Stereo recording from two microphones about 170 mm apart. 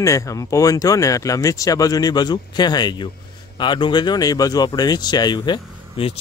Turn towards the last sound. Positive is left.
turn(degrees=30)  # may be behind; listen again after turning